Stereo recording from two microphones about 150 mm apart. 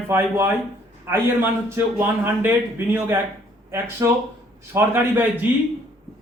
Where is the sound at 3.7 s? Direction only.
20° right (ahead or behind).